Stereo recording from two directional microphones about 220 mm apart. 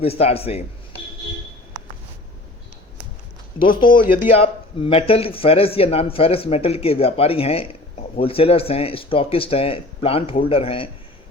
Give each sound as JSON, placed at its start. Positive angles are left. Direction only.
{"t": 0.0, "sound": "a man's voice", "side_deg": 25}
{"t": 3.8, "sound": "a man's voice", "side_deg": 20}